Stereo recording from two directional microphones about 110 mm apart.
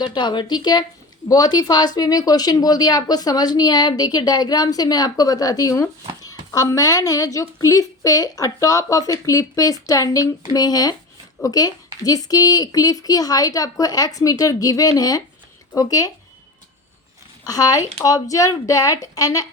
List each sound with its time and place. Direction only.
0.0 s speech: 45° left (ahead or behind)
17.4 s speech: 35° left (ahead or behind)